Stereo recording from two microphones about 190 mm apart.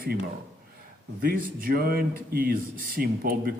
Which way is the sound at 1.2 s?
50° right (ahead or behind).